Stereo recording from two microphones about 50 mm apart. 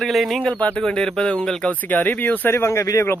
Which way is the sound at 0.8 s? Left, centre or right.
Centre.